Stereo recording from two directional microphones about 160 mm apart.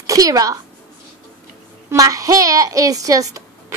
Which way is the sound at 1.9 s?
20° right (ahead or behind).